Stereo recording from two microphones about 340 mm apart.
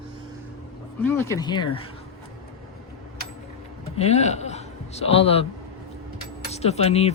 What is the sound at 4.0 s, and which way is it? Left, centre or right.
A man's voice, centre.